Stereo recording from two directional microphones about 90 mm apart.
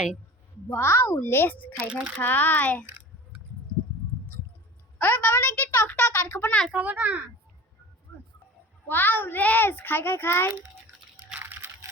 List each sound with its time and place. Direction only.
0.7 s a child's voice: 30° left (ahead or behind)
1.9 s a child's voice: 10° right (ahead or behind)
2.2 s a child's voice: 20° left (ahead or behind)
4.9 s a child's voice: 20° left (ahead or behind)
6.7 s a child's voice: 15° right (ahead or behind)
8.9 s a child's voice: 20° left (ahead or behind)
11.3 s a sound: 20° right (ahead or behind)